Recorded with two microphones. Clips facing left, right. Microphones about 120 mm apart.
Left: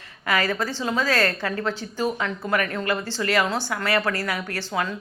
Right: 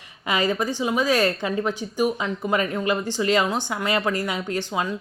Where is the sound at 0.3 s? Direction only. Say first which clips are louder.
Right 1 dB; 20° right (ahead or behind).